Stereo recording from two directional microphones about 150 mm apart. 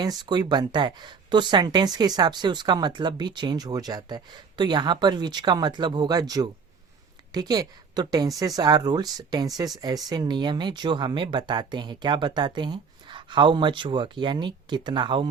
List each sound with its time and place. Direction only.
0.0 s speech: 25° right (ahead or behind)